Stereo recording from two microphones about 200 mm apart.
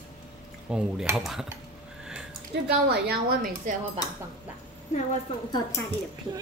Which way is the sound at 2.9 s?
50° right (ahead or behind).